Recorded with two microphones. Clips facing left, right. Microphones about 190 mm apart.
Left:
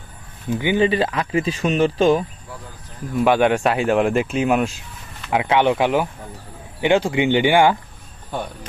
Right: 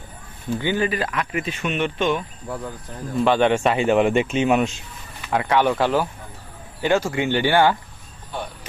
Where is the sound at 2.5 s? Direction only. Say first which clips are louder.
Right 7 dB; 55° right (ahead or behind).